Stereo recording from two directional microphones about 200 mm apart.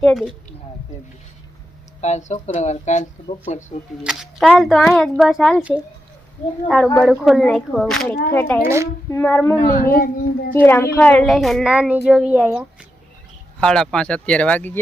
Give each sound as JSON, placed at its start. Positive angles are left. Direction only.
{"t": 0.0, "sound": "speech", "side_deg": 0}
{"t": 2.0, "sound": "speech", "side_deg": 35}
{"t": 4.0, "sound": "speech", "side_deg": -5}
{"t": 6.9, "sound": "speech", "side_deg": 0}
{"t": 8.6, "sound": "a woman's voice", "side_deg": -15}
{"t": 9.0, "sound": "speech", "side_deg": 10}
{"t": 9.7, "sound": "speech", "side_deg": 45}
{"t": 10.5, "sound": "speech", "side_deg": 10}